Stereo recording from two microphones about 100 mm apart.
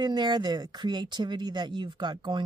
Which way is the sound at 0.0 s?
45° right (ahead or behind).